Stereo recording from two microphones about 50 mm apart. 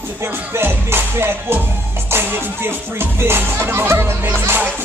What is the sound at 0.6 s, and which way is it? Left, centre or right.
Music, right.